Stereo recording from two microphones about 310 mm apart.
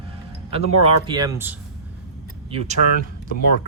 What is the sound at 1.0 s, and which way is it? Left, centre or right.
Speech, centre.